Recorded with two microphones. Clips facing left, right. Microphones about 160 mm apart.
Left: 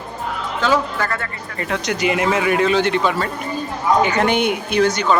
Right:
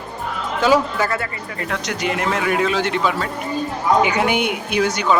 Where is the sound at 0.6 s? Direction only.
10° right (ahead or behind).